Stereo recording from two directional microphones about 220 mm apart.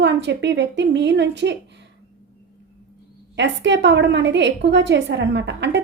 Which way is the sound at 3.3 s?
55° right (ahead or behind).